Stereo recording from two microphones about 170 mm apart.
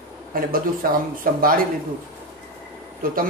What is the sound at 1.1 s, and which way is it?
Speech, 55° right (ahead or behind).